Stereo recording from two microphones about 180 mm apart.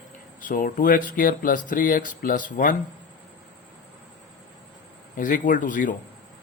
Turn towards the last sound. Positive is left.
turn(degrees=45)  # may be behind; listen again after turning